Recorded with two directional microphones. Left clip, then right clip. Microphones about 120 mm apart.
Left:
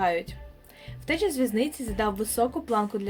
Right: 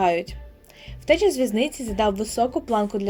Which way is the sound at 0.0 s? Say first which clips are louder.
Right 5 dB; 50° right (ahead or behind).